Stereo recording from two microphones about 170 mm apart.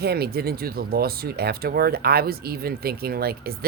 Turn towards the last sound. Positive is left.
turn(degrees=-65)  # may be behind; listen again after turning